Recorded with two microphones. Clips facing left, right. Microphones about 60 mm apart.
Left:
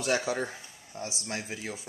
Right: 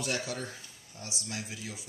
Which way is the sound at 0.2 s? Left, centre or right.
Left.